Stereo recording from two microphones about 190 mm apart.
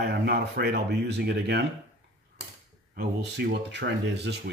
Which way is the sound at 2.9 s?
55° right (ahead or behind).